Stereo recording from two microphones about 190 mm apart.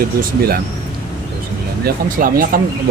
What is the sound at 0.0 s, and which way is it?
Speech, 50° right (ahead or behind).